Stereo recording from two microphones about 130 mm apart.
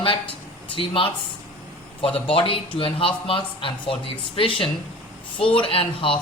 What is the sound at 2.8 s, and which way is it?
A woman's voice, 45° left (ahead or behind).